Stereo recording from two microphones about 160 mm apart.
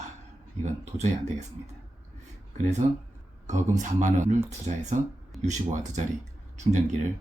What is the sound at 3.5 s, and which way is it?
Speech, 50° right (ahead or behind).